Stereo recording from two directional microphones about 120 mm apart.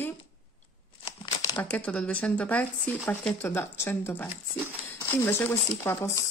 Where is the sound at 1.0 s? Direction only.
35° left (ahead or behind).